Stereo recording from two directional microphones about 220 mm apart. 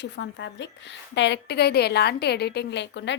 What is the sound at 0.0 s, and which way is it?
A woman's voice, 55° left (ahead or behind).